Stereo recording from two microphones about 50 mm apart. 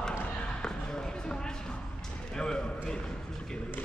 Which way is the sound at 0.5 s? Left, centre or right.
Centre.